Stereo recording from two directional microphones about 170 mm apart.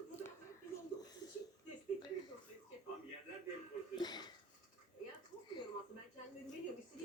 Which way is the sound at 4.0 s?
25° left (ahead or behind).